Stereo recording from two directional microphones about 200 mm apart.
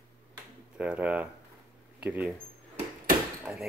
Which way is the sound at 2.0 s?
5° right (ahead or behind).